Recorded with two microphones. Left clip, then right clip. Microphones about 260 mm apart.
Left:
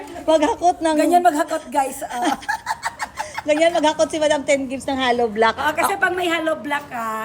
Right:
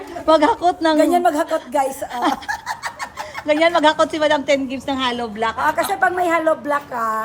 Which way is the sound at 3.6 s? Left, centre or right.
Right.